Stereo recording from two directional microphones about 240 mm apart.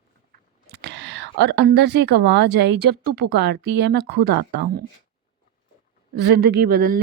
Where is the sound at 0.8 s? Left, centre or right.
Right.